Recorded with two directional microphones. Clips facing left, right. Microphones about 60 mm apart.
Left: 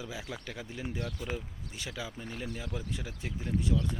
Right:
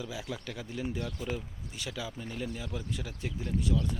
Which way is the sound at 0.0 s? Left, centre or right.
Left.